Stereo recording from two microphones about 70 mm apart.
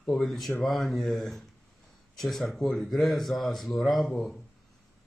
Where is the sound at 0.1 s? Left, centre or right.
Centre.